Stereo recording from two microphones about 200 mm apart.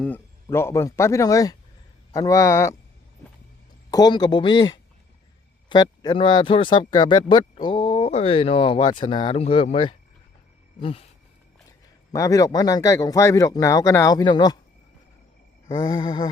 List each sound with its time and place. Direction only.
0.4 s speech: 15° left (ahead or behind)
3.9 s speech: 20° left (ahead or behind)
10.8 s a sound: 25° left (ahead or behind)
12.1 s speech: 15° left (ahead or behind)
15.7 s speech: 20° left (ahead or behind)